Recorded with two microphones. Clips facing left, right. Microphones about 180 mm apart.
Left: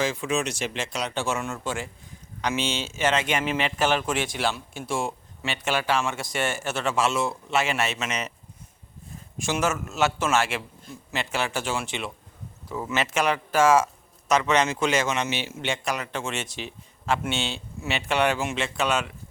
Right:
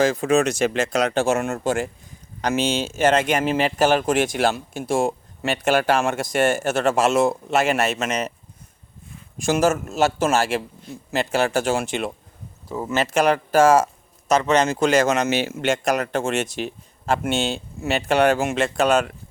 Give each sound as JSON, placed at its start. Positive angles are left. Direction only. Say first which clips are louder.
{"t": 0.0, "sound": "a man's voice", "louder": "right 8 dB", "side_deg": -40}
{"t": 9.5, "sound": "a man's voice", "louder": "right 7 dB", "side_deg": -40}
{"t": 12.6, "sound": "a man's voice", "louder": "right 4 dB", "side_deg": -25}